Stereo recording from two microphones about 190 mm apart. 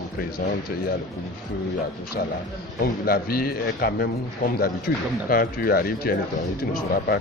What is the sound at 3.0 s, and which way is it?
Speech, 55° left (ahead or behind).